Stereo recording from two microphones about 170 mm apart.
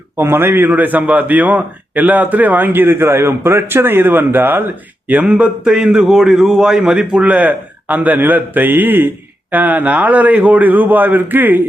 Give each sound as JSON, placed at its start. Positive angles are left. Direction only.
{"t": 0.2, "sound": "a man's voice", "side_deg": -15}